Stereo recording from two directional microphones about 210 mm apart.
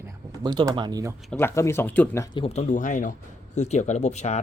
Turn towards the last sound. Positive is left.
turn(degrees=35)  # may be behind; listen again after turning